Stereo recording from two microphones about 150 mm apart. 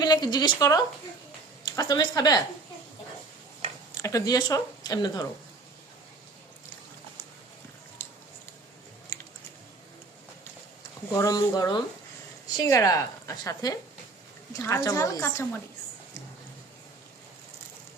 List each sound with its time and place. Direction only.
0.0 s speech: 25° left (ahead or behind)
4.0 s speech: 25° left (ahead or behind)
8.0 s a sound: 15° left (ahead or behind)
11.1 s speech: 20° left (ahead or behind)